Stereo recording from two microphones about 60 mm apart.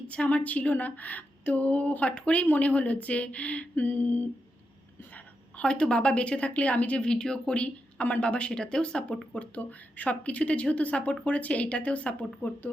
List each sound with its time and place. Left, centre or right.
0.1 s speech: left
5.1 s a woman's voice: centre